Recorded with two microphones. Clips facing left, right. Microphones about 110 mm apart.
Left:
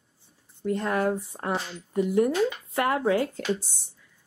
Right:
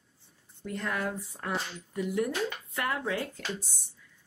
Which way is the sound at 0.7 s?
30° left (ahead or behind).